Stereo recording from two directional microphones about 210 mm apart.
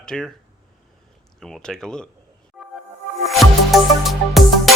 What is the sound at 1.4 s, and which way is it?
Speech, centre (ahead or behind).